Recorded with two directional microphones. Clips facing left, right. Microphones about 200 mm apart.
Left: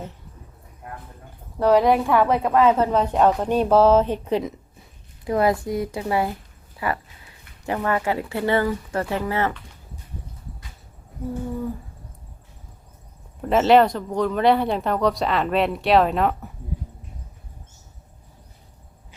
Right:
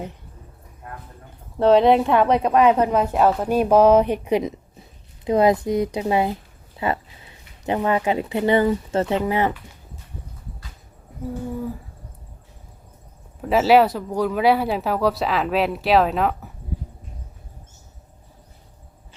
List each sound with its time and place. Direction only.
1.5 s a woman's voice: 25° right (ahead or behind)
13.4 s speech: 5° right (ahead or behind)